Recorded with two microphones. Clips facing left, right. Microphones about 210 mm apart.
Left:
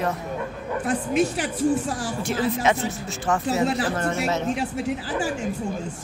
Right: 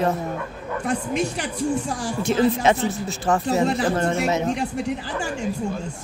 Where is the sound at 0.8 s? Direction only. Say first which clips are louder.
Left 2 dB; 5° left (ahead or behind).